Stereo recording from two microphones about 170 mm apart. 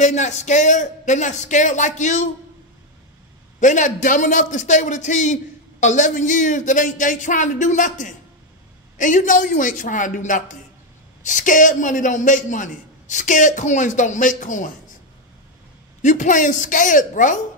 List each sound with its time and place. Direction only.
0.0 s a man's voice: 45° left (ahead or behind)
3.5 s a man's voice: 45° left (ahead or behind)
16.0 s a man's voice: 45° left (ahead or behind)